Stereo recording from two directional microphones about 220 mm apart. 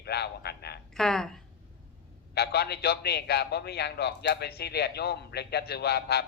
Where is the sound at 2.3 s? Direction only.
45° left (ahead or behind).